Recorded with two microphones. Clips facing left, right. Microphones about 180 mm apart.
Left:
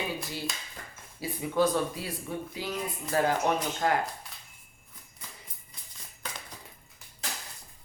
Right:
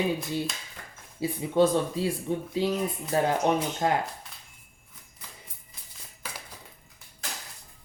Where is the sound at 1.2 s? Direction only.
25° right (ahead or behind).